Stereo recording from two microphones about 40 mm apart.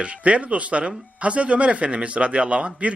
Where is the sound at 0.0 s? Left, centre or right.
Right.